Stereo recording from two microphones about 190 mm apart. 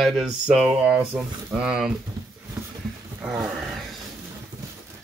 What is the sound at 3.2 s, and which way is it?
Speech, 5° right (ahead or behind).